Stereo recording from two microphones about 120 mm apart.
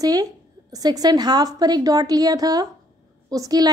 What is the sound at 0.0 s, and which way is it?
A woman's voice, 30° right (ahead or behind).